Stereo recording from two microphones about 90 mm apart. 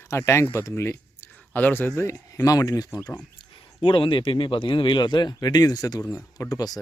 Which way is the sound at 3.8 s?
75° left (ahead or behind).